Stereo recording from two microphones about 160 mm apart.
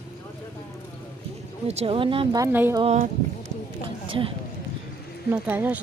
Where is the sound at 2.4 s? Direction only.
15° right (ahead or behind).